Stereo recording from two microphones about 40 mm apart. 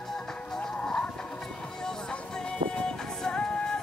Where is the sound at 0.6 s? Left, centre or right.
Centre.